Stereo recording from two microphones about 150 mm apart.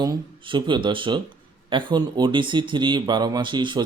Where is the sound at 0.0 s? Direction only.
30° right (ahead or behind).